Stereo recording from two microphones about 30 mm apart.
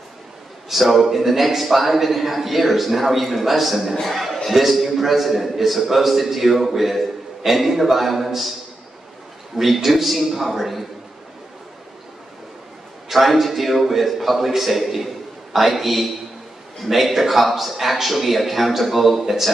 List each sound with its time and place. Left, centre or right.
0.7 s a man's voice: centre
9.5 s a man's voice: centre
9.8 s a man's voice: centre
13.1 s a man's voice: centre